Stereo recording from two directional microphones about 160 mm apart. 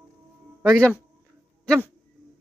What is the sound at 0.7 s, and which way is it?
Speech, 5° left (ahead or behind).